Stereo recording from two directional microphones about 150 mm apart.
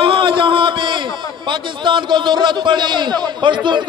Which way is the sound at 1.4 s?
30° right (ahead or behind).